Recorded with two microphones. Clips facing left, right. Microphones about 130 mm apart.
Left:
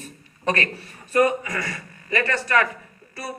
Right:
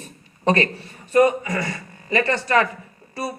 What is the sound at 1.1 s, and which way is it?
A man's voice, 25° right (ahead or behind).